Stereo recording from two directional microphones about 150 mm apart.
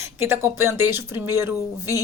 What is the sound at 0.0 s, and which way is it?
Speech, 15° right (ahead or behind).